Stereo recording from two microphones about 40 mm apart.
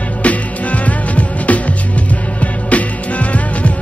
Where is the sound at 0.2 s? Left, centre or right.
Left.